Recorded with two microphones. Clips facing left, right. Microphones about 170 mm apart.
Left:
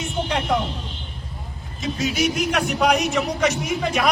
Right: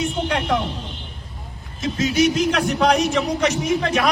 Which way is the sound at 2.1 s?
10° left (ahead or behind).